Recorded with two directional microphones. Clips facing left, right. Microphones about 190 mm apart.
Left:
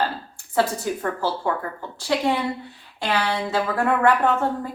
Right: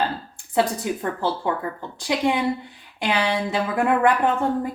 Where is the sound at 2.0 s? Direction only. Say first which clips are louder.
Right 1 dB; 15° right (ahead or behind).